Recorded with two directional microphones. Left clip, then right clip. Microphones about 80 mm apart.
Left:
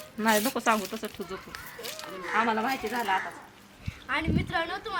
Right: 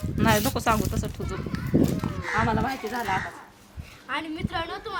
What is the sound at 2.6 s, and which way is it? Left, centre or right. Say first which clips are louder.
Speech: right 1 dB; centre.